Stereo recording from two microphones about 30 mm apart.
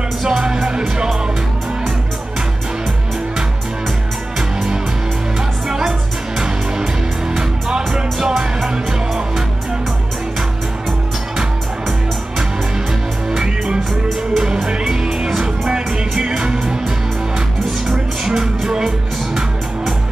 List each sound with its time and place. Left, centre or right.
0.4 s music: right
5.7 s music: right
7.7 s music: right
14.3 s music: centre
15.4 s music: right
18.2 s music: right